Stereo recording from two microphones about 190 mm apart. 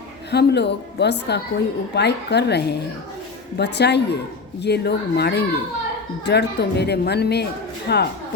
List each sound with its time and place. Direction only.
0.3 s a woman's voice: 60° left (ahead or behind)